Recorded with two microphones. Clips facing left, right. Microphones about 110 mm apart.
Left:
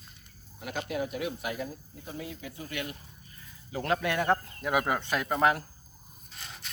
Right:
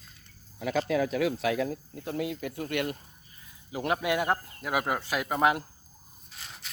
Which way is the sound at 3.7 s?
15° right (ahead or behind).